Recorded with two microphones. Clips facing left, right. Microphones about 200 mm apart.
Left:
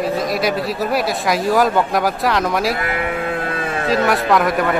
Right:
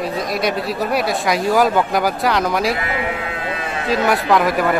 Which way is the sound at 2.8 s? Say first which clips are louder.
Left 2 dB; 50° left (ahead or behind).